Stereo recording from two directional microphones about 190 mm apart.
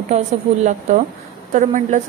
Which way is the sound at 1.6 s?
40° right (ahead or behind).